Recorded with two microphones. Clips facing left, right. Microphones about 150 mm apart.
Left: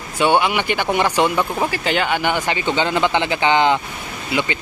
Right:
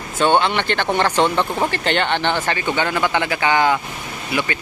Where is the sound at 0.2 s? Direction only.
10° left (ahead or behind).